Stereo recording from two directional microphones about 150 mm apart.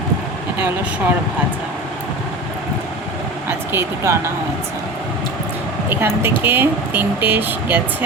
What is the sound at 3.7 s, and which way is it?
Speech, 15° right (ahead or behind).